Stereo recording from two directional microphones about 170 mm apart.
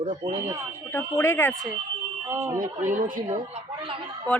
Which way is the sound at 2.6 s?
50° right (ahead or behind).